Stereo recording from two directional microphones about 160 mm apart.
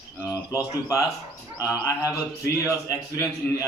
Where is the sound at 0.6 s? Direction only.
20° left (ahead or behind).